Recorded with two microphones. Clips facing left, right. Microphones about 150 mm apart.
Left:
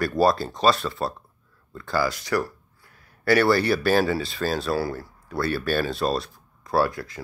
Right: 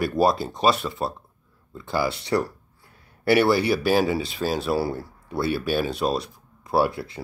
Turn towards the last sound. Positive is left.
turn(degrees=-25)  # may be behind; listen again after turning